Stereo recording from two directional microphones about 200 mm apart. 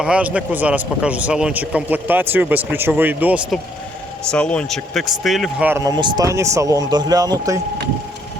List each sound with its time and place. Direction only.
0.0 s speech: 5° right (ahead or behind)
4.3 s speech: 5° left (ahead or behind); by 7.6 s 20° right (ahead or behind)